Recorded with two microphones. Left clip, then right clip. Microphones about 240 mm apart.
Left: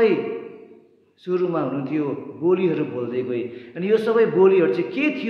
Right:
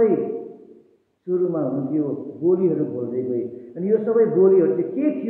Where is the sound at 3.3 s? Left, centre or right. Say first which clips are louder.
Right 1 dB; centre.